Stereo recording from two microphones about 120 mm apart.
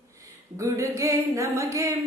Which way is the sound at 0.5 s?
25° right (ahead or behind).